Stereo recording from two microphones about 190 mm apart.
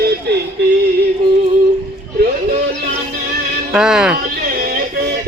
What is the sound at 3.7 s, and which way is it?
Speech, 5° right (ahead or behind).